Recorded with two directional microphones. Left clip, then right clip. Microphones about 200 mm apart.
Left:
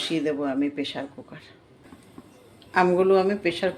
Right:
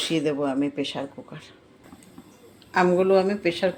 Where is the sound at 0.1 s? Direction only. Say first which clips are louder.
Right 1 dB; 15° right (ahead or behind).